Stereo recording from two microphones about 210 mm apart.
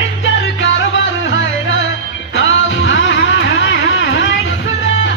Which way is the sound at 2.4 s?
60° left (ahead or behind).